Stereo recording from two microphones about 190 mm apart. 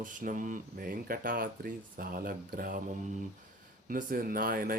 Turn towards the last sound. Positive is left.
turn(degrees=-50)  # may be behind; listen again after turning